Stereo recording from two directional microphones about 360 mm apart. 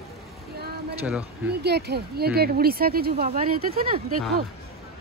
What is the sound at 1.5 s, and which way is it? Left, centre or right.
Speech, right.